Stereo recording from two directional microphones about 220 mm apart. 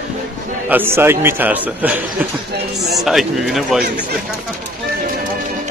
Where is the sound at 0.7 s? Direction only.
10° right (ahead or behind).